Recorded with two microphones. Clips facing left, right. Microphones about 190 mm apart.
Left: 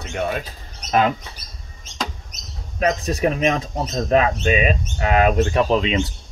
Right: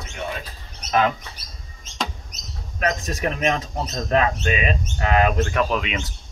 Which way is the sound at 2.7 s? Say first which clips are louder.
Left 4 dB; 30° left (ahead or behind).